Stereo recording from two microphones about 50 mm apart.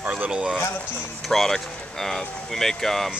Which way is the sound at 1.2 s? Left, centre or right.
Centre.